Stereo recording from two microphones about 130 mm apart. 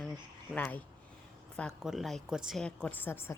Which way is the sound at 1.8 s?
Centre (ahead or behind).